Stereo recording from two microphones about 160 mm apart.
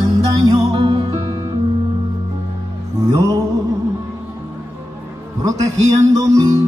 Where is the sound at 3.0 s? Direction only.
20° right (ahead or behind).